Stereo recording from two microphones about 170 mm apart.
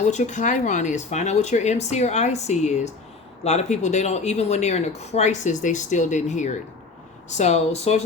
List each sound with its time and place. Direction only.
0.0 s speech: 45° left (ahead or behind)